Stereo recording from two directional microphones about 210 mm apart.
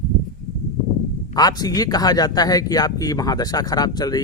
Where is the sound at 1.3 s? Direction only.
20° left (ahead or behind).